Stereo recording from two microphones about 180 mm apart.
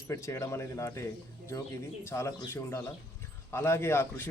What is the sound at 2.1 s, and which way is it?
Speech, 15° left (ahead or behind).